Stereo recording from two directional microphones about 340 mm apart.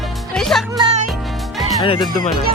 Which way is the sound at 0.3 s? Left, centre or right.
Centre.